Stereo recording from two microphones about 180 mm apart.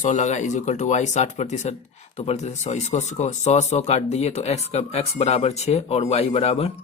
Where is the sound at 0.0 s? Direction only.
40° left (ahead or behind).